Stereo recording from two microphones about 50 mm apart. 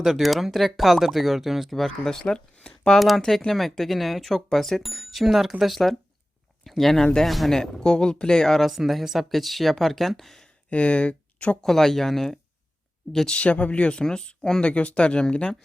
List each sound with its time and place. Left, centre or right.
0.0 s speech: centre
1.7 s speech: centre
10.7 s speech: left
11.6 s speech: centre
13.3 s speech: left